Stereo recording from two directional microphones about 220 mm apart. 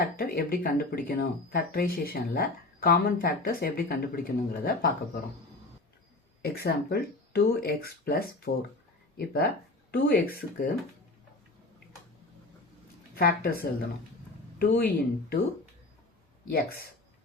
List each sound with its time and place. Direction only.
0.0 s speech: 40° left (ahead or behind)
6.4 s speech: 45° left (ahead or behind)
13.1 s speech: 45° left (ahead or behind)
16.5 s speech: 45° left (ahead or behind)